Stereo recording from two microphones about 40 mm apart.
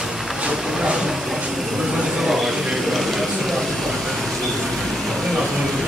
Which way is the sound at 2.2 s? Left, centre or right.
Centre.